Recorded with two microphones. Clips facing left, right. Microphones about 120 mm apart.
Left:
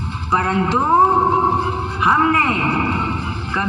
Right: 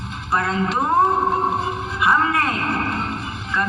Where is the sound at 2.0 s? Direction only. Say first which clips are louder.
Left 3 dB; 45° left (ahead or behind).